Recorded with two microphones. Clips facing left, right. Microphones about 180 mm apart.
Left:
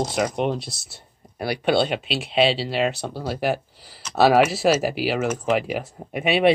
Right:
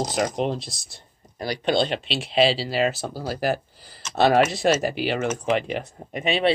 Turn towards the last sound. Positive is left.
turn(degrees=10)  # may be behind; listen again after turning